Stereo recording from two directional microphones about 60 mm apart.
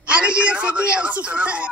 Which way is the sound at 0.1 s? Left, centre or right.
Right.